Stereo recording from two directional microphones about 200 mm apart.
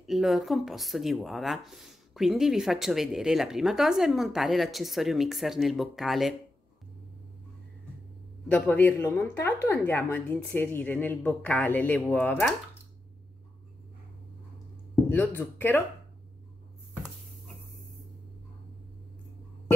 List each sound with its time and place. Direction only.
0.0 s speech: centre (ahead or behind)
8.5 s a woman's voice: 10° left (ahead or behind)
15.0 s a woman's voice: 10° left (ahead or behind)